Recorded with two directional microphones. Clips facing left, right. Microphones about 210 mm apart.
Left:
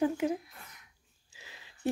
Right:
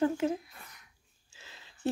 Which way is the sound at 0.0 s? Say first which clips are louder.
Right 1 dB; 15° left (ahead or behind).